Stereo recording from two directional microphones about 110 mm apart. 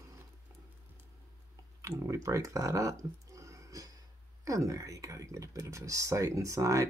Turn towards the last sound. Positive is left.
turn(degrees=-30)  # may be behind; listen again after turning